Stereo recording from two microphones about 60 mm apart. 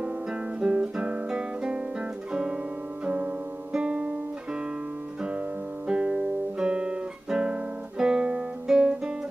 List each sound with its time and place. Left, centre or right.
0.0 s guitar: centre
3.1 s music: right
5.9 s guitar: centre